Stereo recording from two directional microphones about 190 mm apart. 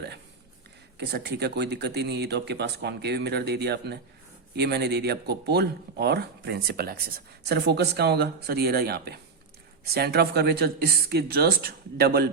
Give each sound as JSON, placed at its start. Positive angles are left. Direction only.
{"t": 0.9, "sound": "speech", "side_deg": -60}